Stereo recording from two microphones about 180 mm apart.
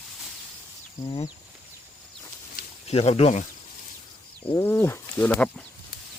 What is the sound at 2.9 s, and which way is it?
Speech, 35° left (ahead or behind).